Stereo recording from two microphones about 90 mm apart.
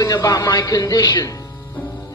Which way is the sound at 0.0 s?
40° left (ahead or behind).